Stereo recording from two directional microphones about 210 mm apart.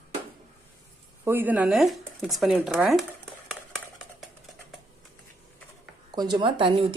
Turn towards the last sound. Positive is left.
turn(degrees=-25)  # may be behind; listen again after turning